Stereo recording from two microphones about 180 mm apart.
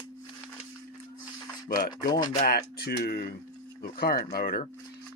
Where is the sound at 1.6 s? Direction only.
50° left (ahead or behind).